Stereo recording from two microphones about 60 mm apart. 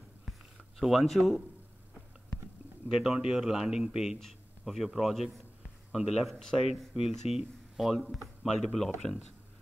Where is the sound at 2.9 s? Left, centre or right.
Centre.